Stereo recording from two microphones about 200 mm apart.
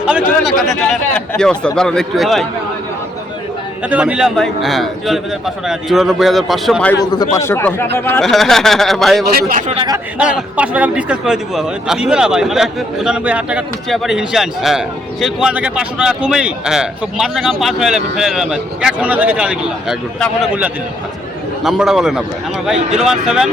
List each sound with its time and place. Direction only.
0.0 s a man's voice: 5° right (ahead or behind)
3.8 s a man's voice: 5° right (ahead or behind)
7.0 s a man's voice: 20° left (ahead or behind); by 9.2 s centre (ahead or behind)
9.5 s speech: 35° right (ahead or behind)
10.2 s a man's voice: 5° right (ahead or behind)
21.6 s a man's voice: centre (ahead or behind)